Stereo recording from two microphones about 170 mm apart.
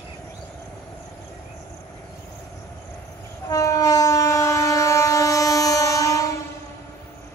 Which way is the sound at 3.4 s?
20° left (ahead or behind).